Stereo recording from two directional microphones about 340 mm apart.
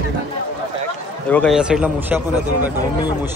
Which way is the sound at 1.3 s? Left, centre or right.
Centre.